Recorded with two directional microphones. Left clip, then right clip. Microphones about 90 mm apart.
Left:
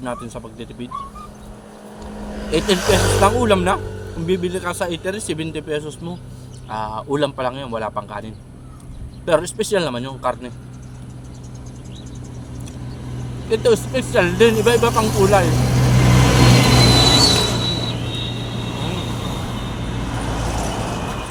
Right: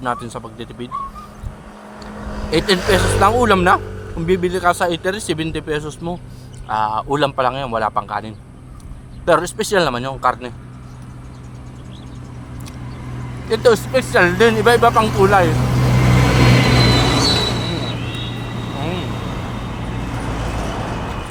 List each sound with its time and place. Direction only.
0.0 s speech: 50° right (ahead or behind)
2.0 s vehicle: 5° left (ahead or behind)
2.5 s speech: 45° right (ahead or behind)
13.5 s speech: 40° right (ahead or behind)
15.5 s vehicle: 15° left (ahead or behind)
16.2 s vehicle: 30° left (ahead or behind)
16.5 s vehicle: 50° left (ahead or behind); by 20.7 s 30° left (ahead or behind)
20.7 s vehicle: 50° left (ahead or behind)